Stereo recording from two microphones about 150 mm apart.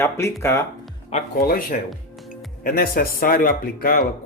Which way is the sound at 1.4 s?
75° left (ahead or behind).